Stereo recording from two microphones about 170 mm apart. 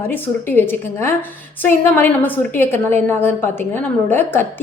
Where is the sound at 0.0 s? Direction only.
10° left (ahead or behind).